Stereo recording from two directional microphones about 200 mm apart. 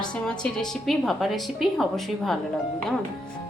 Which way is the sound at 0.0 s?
5° left (ahead or behind).